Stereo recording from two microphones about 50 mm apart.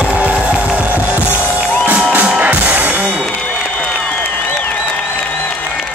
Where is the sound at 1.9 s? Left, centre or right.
Right.